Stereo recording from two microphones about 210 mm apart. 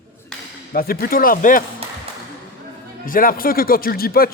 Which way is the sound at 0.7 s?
45° left (ahead or behind).